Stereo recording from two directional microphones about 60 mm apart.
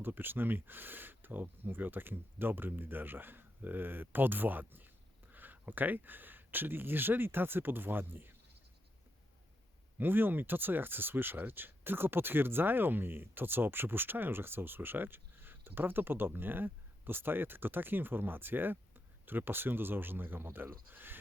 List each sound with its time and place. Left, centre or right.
0.0 s speech: right
10.0 s speech: right